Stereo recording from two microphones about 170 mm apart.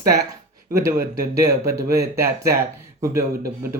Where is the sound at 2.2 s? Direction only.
15° right (ahead or behind).